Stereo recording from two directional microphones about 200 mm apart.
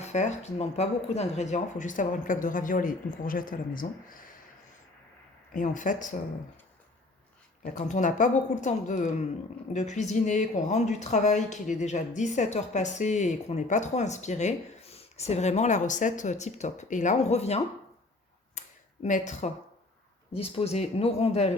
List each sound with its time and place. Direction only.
0.0 s a woman's voice: 35° left (ahead or behind)
5.5 s a woman's voice: 40° left (ahead or behind)
7.6 s a woman's voice: 35° left (ahead or behind)
18.6 s a sound: 35° left (ahead or behind)
19.0 s a woman's voice: 40° left (ahead or behind)